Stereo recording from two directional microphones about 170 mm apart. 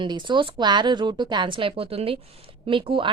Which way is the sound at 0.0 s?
25° right (ahead or behind).